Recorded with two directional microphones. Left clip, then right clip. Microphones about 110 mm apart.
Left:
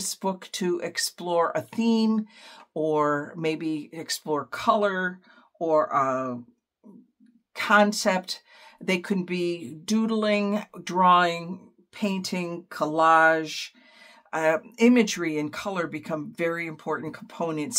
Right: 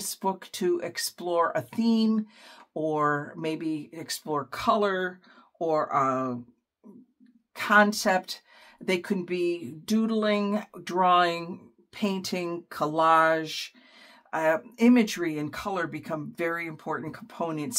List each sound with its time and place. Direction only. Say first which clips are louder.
0.0 s speech: even; 40° left (ahead or behind)
4.5 s speech: left 2 dB; 20° left (ahead or behind)
7.5 s speech: left 1 dB; 40° left (ahead or behind)
14.3 s speech: left 1 dB; 40° left (ahead or behind)